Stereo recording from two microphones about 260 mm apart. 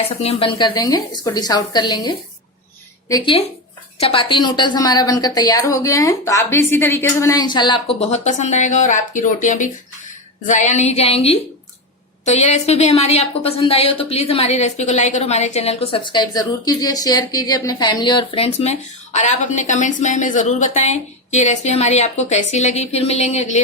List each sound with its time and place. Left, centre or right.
0.2 s a woman's voice: left
3.9 s a woman's voice: left